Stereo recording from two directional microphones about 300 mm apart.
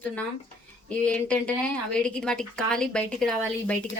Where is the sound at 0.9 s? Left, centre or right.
Centre.